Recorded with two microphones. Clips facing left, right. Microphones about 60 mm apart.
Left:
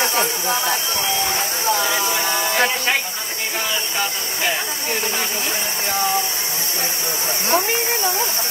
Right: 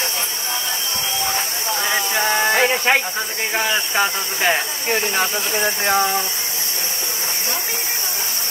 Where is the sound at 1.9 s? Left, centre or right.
Right.